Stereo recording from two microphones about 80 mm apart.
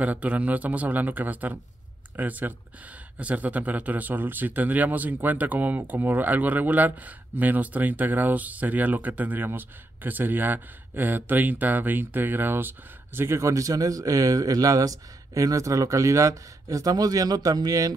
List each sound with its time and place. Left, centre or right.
0.0 s a man's voice: centre; by 17.9 s right